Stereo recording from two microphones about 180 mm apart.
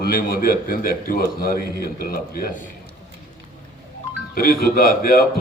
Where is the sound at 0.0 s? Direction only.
55° left (ahead or behind).